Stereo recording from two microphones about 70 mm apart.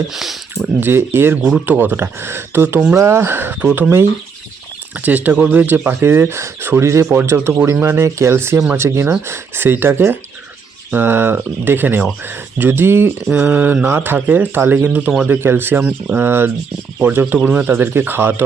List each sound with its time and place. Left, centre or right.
0.1 s speech: centre
0.8 s speech: right
1.4 s speech: centre
1.6 s speech: right
4.9 s speech: right
7.1 s speech: right
13.3 s speech: right
15.8 s speech: centre
16.1 s speech: right